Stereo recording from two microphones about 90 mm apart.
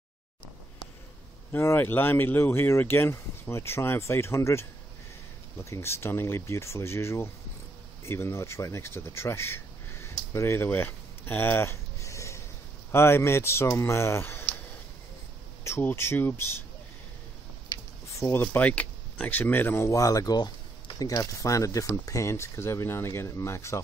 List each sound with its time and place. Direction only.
1.5 s speech: 25° left (ahead or behind)
12.0 s a sound: 35° left (ahead or behind)
12.9 s speech: 30° left (ahead or behind)
15.8 s speech: 25° left (ahead or behind)
18.3 s speech: 20° left (ahead or behind)
19.9 s speech: 40° left (ahead or behind)
20.3 s speech: 55° left (ahead or behind); by 23.8 s 30° left (ahead or behind)